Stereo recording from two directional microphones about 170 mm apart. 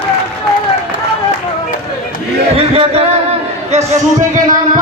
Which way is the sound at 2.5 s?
35° right (ahead or behind).